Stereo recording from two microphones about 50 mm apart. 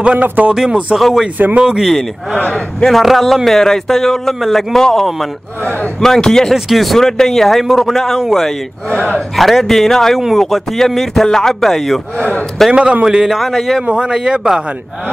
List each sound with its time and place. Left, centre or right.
0.0 s speech: right
0.6 s speech: centre
0.9 s speech: centre
2.5 s speech: centre
12.2 s a man's voice: left
12.7 s speech: right
13.0 s speech: centre
13.8 s speech: centre